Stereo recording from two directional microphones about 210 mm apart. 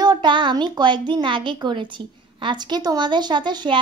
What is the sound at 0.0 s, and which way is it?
A woman's voice, 20° right (ahead or behind).